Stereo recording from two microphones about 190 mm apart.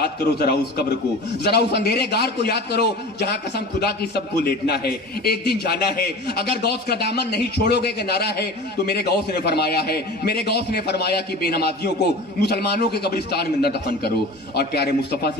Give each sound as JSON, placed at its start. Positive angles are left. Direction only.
{"t": 0.0, "sound": "a man's voice", "side_deg": 55}